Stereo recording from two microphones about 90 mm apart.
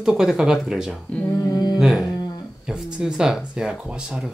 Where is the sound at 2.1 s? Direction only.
45° left (ahead or behind).